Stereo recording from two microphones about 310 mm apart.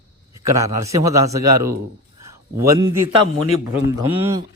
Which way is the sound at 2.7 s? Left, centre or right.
Centre.